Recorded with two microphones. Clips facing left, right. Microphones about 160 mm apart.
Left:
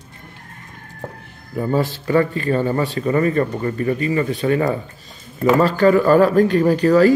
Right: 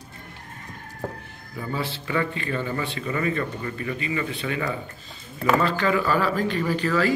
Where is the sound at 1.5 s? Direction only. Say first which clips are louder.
Left 10 dB; 45° left (ahead or behind).